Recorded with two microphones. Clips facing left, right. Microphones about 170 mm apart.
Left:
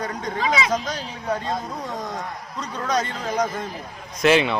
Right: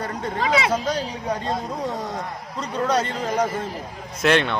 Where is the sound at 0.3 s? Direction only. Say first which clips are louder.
Right 2 dB; 65° right (ahead or behind).